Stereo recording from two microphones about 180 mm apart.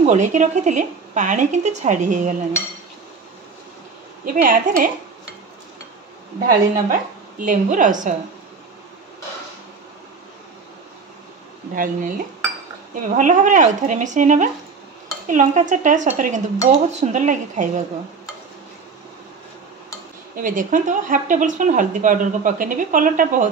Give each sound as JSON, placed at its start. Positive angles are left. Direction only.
{"t": 0.0, "sound": "speech", "side_deg": -40}
{"t": 4.3, "sound": "speech", "side_deg": -50}
{"t": 6.4, "sound": "speech", "side_deg": -50}
{"t": 11.7, "sound": "speech", "side_deg": -50}
{"t": 20.3, "sound": "speech", "side_deg": -50}